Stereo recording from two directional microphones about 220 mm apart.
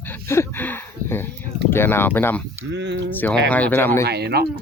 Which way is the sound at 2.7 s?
55° right (ahead or behind).